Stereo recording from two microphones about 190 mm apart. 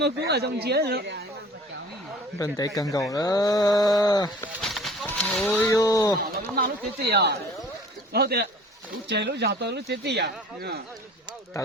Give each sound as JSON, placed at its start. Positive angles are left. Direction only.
{"t": 0.0, "sound": "speech", "side_deg": -60}
{"t": 2.4, "sound": "speech", "side_deg": 20}
{"t": 4.6, "sound": "a sound", "side_deg": 0}
{"t": 6.6, "sound": "speech", "side_deg": -60}
{"t": 11.6, "sound": "speech", "side_deg": 20}